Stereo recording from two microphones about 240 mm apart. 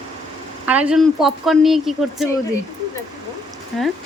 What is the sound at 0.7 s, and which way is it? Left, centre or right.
Speech, centre.